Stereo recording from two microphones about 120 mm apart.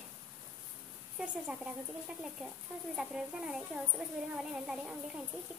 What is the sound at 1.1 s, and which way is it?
Speech, 10° right (ahead or behind).